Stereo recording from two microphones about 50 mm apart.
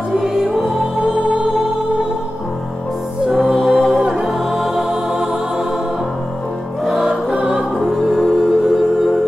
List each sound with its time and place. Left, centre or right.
0.2 s music: centre
3.3 s music: centre
6.8 s music: centre
7.1 s music: centre
7.8 s music: centre